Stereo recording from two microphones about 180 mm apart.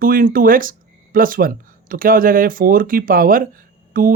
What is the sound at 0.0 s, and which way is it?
Speech, 50° right (ahead or behind).